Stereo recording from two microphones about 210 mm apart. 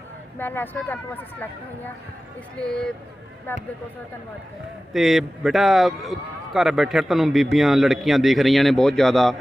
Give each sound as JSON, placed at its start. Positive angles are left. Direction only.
{"t": 0.3, "sound": "a man's voice", "side_deg": 10}
{"t": 4.9, "sound": "a man's voice", "side_deg": 0}